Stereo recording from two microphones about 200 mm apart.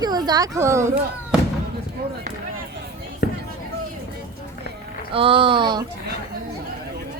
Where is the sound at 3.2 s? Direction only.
50° left (ahead or behind).